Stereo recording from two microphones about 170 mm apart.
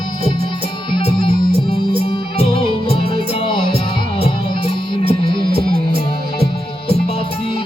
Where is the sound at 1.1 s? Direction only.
30° left (ahead or behind).